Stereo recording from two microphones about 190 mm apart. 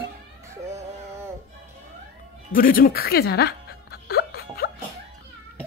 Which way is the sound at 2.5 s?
50° left (ahead or behind).